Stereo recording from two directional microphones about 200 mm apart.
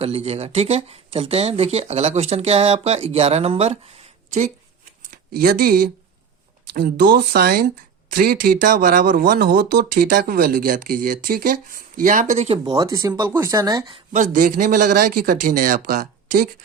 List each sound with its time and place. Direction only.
0.0 s speech: 30° right (ahead or behind)
12.6 s speech: 15° right (ahead or behind)
14.1 s speech: 40° right (ahead or behind)